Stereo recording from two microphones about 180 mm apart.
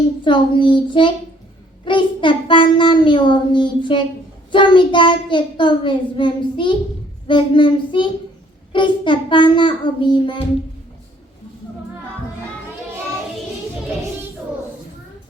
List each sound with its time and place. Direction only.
0.3 s a child's voice: 25° left (ahead or behind)